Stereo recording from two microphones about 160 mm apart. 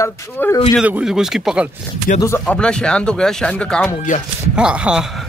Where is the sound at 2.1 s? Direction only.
55° left (ahead or behind).